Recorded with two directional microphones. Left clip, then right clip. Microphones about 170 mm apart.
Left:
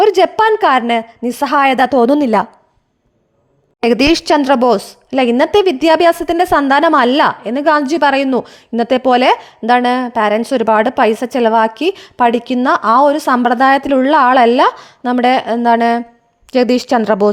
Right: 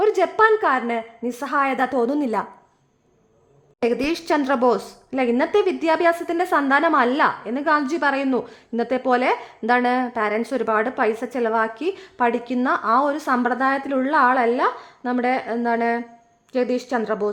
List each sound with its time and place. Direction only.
0.0 s a woman's voice: 45° left (ahead or behind)
3.8 s a woman's voice: 55° left (ahead or behind)